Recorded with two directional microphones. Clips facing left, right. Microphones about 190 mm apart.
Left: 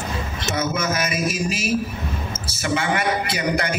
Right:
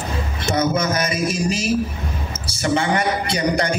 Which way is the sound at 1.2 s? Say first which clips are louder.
Right 3 dB; 5° left (ahead or behind).